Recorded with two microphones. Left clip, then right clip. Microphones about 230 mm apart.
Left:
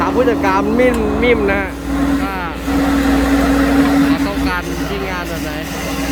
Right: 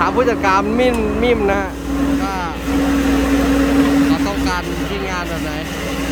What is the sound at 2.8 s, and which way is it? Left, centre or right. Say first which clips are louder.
Vehicle: left 2 dB; left.